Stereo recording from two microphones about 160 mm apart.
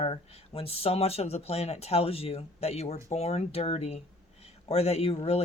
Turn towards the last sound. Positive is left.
turn(degrees=40)  # may be behind; listen again after turning